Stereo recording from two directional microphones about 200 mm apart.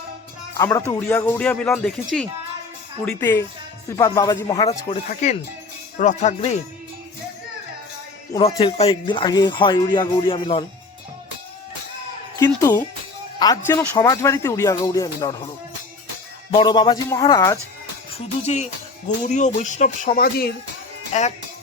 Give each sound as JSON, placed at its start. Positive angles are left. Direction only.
{"t": 0.9, "sound": "speech", "side_deg": 10}
{"t": 5.0, "sound": "speech", "side_deg": 35}
{"t": 8.4, "sound": "speech", "side_deg": 25}
{"t": 12.5, "sound": "speech", "side_deg": 20}
{"t": 16.5, "sound": "speech", "side_deg": 25}
{"t": 18.1, "sound": "speech", "side_deg": 35}
{"t": 21.1, "sound": "speech", "side_deg": 35}